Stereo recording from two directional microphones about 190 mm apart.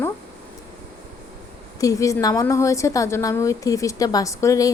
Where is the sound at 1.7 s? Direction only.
15° left (ahead or behind).